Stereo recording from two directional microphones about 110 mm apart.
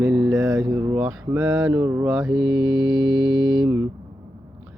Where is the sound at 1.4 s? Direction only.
5° right (ahead or behind).